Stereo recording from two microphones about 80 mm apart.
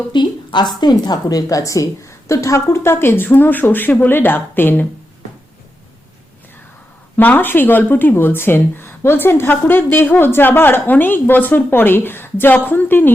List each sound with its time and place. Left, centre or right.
0.1 s a woman's voice: left
7.2 s speech: left